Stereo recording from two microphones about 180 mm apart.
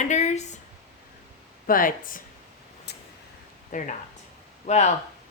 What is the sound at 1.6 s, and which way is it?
Speech, 50° left (ahead or behind).